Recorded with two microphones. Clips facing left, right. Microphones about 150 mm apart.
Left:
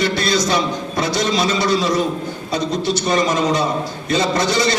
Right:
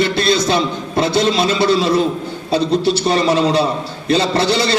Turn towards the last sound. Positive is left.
turn(degrees=-30)  # may be behind; listen again after turning